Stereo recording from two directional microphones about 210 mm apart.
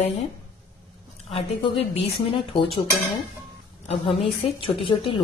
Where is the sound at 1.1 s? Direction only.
25° left (ahead or behind).